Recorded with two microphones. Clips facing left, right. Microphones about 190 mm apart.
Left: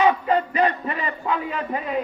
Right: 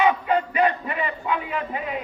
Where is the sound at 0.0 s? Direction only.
35° left (ahead or behind).